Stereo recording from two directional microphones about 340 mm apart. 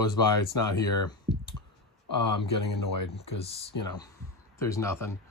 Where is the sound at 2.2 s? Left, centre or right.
Left.